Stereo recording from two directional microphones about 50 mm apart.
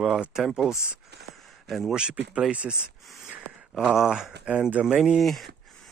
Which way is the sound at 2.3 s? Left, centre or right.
Right.